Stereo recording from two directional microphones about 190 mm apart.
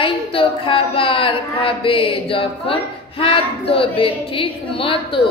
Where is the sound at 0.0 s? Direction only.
30° left (ahead or behind).